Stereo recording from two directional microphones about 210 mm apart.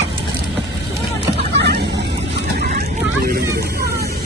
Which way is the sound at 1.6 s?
50° right (ahead or behind).